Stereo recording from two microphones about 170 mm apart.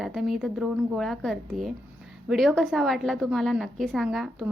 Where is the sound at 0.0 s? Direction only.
Centre (ahead or behind).